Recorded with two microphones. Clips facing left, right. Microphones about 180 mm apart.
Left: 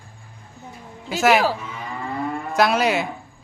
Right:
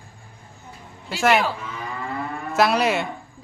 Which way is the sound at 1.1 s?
Centre (ahead or behind).